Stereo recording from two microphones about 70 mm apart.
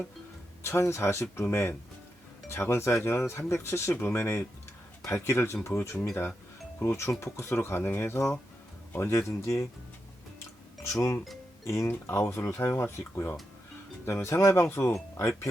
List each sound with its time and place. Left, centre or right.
0.6 s speech: left
10.8 s speech: left
11.9 s speech: left